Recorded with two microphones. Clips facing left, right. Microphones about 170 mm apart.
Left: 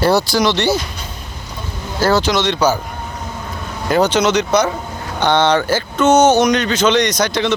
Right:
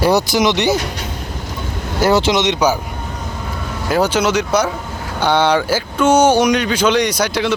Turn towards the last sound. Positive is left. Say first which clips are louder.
# even
turn(degrees=-10)  # may be behind; listen again after turning